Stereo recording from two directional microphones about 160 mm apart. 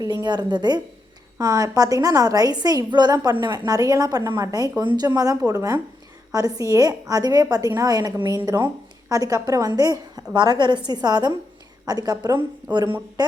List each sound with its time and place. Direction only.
0.0 s a woman's voice: 25° right (ahead or behind)